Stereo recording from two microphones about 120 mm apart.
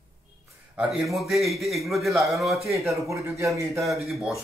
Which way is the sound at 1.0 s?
Centre (ahead or behind).